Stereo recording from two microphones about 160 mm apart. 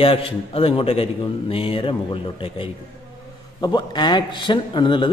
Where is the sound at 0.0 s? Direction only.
35° left (ahead or behind).